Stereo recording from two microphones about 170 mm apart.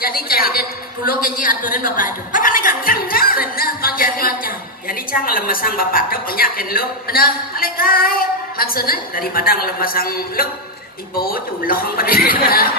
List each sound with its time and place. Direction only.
0.0 s a woman's voice: 60° left (ahead or behind)